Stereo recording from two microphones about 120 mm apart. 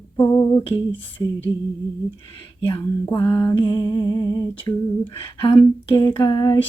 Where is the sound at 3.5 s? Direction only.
40° left (ahead or behind).